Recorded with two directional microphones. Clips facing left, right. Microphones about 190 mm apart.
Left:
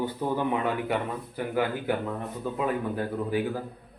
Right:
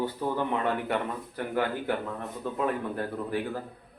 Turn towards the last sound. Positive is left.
turn(degrees=5)  # may be behind; listen again after turning